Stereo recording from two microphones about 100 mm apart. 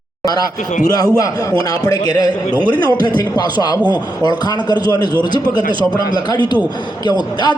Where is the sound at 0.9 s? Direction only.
40° left (ahead or behind).